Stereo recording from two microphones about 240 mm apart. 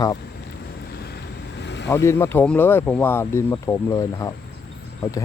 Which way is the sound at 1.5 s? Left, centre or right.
Left.